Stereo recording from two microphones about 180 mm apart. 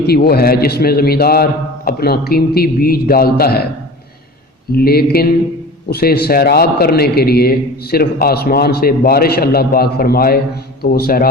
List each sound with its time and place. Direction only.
0.0 s a man's voice: 60° left (ahead or behind)
4.7 s a man's voice: 60° left (ahead or behind)